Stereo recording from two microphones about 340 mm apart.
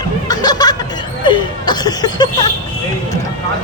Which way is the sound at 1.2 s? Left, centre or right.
Centre.